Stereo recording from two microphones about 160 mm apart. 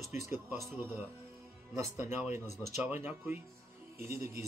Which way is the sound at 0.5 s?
15° right (ahead or behind).